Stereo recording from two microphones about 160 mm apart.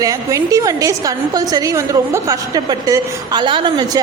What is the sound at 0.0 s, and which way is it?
A woman's voice, 20° right (ahead or behind).